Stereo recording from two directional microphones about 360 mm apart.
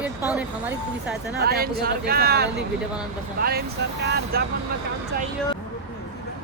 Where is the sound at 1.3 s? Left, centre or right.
Right.